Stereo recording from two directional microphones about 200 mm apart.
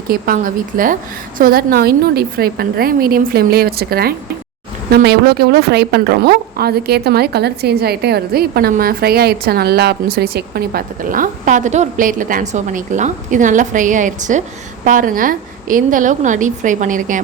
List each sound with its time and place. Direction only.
0.1 s a woman's voice: 45° right (ahead or behind)